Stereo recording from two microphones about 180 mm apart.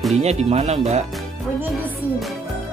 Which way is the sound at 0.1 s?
35° right (ahead or behind).